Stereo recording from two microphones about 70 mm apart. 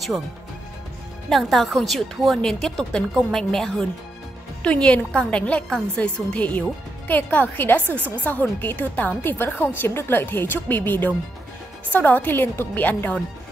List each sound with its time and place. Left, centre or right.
1.3 s a woman's voice: centre; by 13.2 s left